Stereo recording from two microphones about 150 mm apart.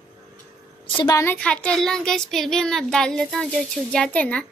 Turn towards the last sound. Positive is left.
turn(degrees=10)  # may be behind; listen again after turning